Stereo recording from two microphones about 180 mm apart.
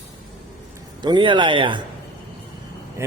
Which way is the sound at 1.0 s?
25° right (ahead or behind).